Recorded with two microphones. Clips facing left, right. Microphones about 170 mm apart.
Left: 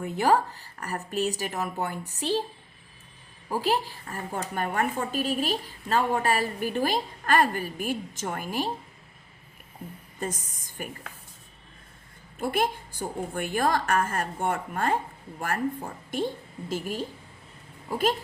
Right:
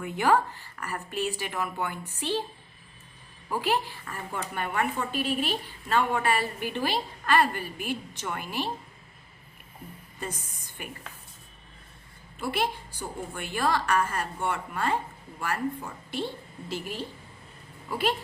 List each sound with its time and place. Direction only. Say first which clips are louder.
0.0 s speech: left 1 dB; 35° left (ahead or behind)
3.5 s speech: left 1 dB; 40° left (ahead or behind)
10.8 s a woman's voice: left 4 dB; 45° left (ahead or behind)
12.4 s a woman's voice: left 3 dB; 50° left (ahead or behind)